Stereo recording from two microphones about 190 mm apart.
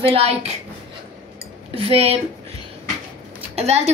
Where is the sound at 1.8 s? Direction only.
30° right (ahead or behind).